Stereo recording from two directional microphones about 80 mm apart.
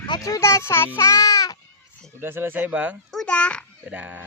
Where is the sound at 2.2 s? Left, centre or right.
Right.